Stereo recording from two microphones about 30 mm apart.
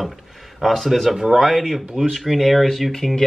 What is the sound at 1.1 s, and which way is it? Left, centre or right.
Speech, centre.